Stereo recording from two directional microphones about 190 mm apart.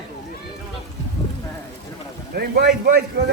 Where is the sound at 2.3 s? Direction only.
60° right (ahead or behind).